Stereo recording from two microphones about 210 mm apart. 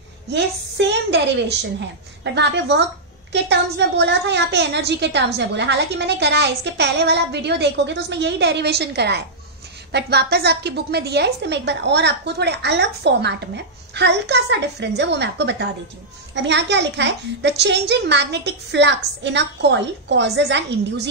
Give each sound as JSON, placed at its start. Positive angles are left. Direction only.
{"t": 0.3, "sound": "a child's voice", "side_deg": -55}
{"t": 2.3, "sound": "a child's voice", "side_deg": -55}